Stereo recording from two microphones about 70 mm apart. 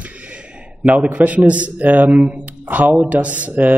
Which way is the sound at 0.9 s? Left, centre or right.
Right.